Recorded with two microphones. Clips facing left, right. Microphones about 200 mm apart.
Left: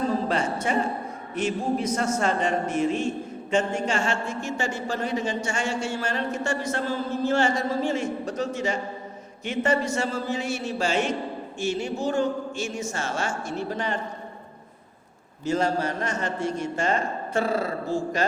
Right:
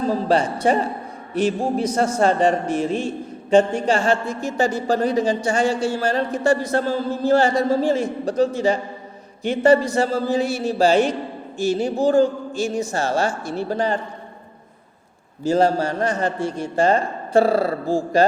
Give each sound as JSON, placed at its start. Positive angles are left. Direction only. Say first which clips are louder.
{"t": 0.1, "sound": "a man's voice", "louder": "right 6 dB", "side_deg": -35}
{"t": 15.4, "sound": "a man's voice", "louder": "right 6 dB", "side_deg": -35}